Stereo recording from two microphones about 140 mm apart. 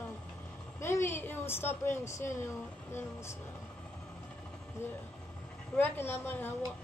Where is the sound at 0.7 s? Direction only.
20° left (ahead or behind).